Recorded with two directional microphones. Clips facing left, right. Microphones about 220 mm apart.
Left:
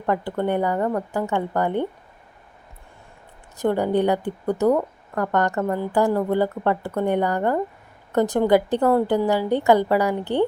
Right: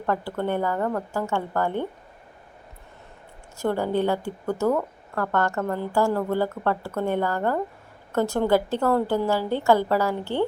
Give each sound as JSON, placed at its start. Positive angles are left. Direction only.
{"t": 0.0, "sound": "a woman's voice", "side_deg": 15}
{"t": 3.6, "sound": "a woman's voice", "side_deg": 15}